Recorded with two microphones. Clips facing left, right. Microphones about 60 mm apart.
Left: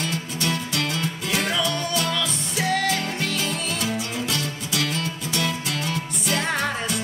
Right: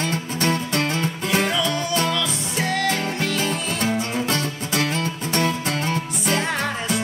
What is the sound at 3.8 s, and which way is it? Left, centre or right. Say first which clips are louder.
Music: right 4 dB; right.